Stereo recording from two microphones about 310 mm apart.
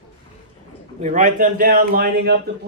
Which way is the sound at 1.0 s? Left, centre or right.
Right.